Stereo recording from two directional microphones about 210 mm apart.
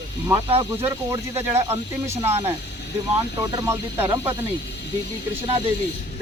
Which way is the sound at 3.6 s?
10° right (ahead or behind).